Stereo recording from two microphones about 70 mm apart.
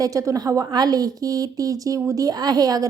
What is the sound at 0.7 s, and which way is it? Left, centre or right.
A woman's voice, right.